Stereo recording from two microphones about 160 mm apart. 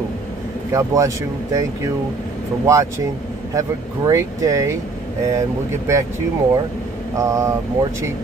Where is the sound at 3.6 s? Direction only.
20° right (ahead or behind).